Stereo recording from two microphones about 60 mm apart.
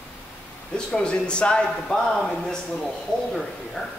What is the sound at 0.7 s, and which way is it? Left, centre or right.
A man's voice, centre.